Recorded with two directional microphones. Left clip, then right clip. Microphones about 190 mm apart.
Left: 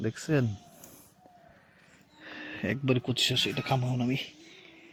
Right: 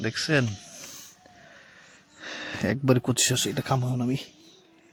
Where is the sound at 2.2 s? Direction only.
15° right (ahead or behind).